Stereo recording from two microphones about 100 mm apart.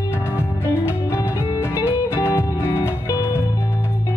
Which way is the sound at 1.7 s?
25° left (ahead or behind).